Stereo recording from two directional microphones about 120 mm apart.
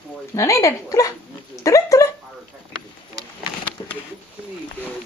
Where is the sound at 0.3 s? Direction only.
25° left (ahead or behind).